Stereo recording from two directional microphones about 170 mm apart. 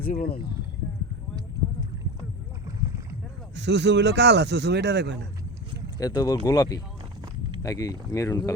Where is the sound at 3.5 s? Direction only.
90° right.